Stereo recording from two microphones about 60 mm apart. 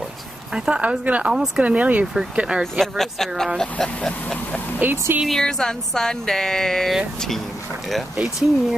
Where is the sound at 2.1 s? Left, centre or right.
Centre.